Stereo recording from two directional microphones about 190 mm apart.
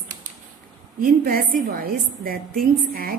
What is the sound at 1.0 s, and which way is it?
A woman's voice, 50° right (ahead or behind).